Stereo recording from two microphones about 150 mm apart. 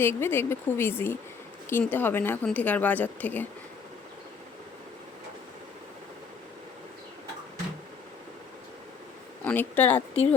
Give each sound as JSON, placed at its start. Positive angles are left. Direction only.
{"t": 0.0, "sound": "a woman's voice", "side_deg": 15}
{"t": 9.5, "sound": "a woman's voice", "side_deg": 10}